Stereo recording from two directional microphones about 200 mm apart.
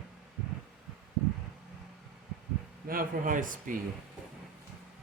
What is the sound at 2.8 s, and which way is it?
Speech, 45° right (ahead or behind).